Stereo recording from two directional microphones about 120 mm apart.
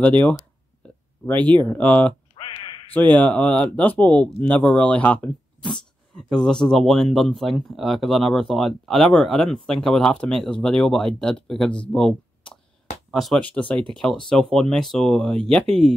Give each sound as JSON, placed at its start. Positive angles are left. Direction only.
{"t": 1.2, "sound": "speech", "side_deg": 15}
{"t": 2.3, "sound": "quack", "side_deg": 45}
{"t": 2.9, "sound": "speech", "side_deg": 15}
{"t": 11.9, "sound": "a sound", "side_deg": 5}
{"t": 13.1, "sound": "speech", "side_deg": 0}